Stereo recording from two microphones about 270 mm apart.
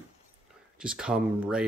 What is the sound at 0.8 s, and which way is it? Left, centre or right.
Speech, centre.